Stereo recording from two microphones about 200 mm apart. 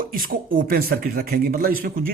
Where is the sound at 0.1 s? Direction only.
45° right (ahead or behind).